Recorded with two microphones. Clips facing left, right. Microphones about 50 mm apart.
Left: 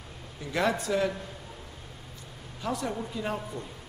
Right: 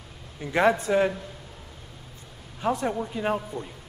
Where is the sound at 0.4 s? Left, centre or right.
Right.